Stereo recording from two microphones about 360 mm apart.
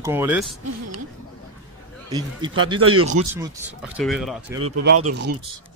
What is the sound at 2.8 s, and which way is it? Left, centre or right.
Speech, right.